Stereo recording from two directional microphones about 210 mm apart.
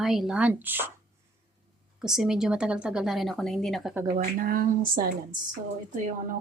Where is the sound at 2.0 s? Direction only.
Centre (ahead or behind).